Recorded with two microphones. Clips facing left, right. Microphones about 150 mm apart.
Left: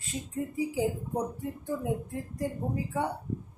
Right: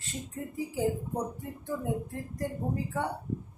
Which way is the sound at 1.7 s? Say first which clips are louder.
Even; 10° left (ahead or behind).